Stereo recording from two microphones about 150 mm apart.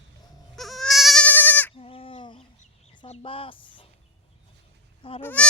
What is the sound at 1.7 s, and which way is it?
Sheep, 40° left (ahead or behind).